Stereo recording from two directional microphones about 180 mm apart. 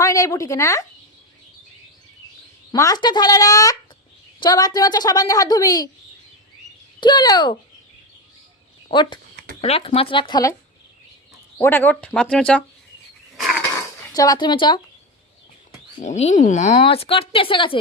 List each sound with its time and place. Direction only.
0.0 s speech: 15° left (ahead or behind)
2.7 s a woman's voice: 20° left (ahead or behind)
7.0 s a woman's voice: 25° left (ahead or behind)
8.9 s a woman's voice: 25° left (ahead or behind)
11.5 s speech: 10° left (ahead or behind)
13.3 s a sound: centre (ahead or behind)
14.1 s a woman's voice: 20° left (ahead or behind)
16.0 s speech: 40° left (ahead or behind)